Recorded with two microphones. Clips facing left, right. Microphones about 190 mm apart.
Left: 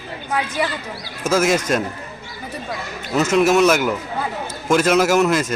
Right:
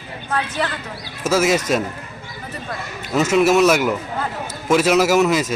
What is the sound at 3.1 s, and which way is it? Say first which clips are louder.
Speech: even; 5° right (ahead or behind).